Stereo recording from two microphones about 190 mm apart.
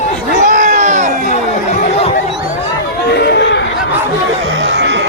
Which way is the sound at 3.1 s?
60° left (ahead or behind).